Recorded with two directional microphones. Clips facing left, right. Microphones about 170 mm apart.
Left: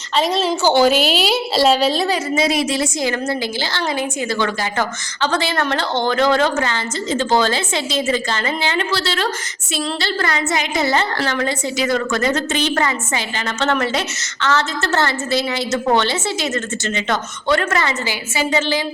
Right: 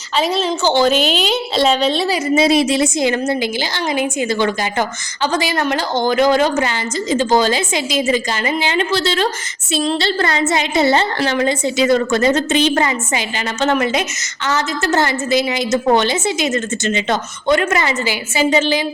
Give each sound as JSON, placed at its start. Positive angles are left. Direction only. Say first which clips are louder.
{"t": 0.2, "sound": "a woman's voice", "louder": "even", "side_deg": 0}
{"t": 2.3, "sound": "a woman's voice", "louder": "right 8 dB", "side_deg": -25}